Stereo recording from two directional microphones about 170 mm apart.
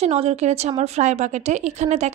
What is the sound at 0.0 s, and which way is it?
A woman's voice, 40° right (ahead or behind).